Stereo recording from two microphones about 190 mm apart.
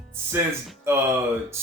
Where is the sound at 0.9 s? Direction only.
10° right (ahead or behind).